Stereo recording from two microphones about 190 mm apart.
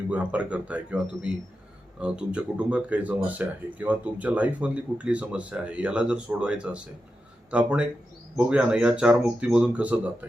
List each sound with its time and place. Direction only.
0.1 s speech: 5° right (ahead or behind)